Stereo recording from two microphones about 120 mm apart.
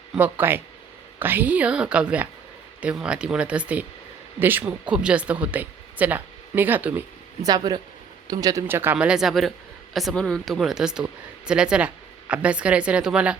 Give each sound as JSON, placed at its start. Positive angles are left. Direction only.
{"t": 0.2, "sound": "speech", "side_deg": -15}
{"t": 7.4, "sound": "speech", "side_deg": -35}
{"t": 8.6, "sound": "speech", "side_deg": -15}